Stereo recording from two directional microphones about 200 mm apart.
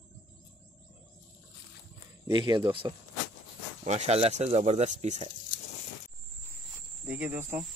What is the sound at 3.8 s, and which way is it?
Speech, 35° right (ahead or behind).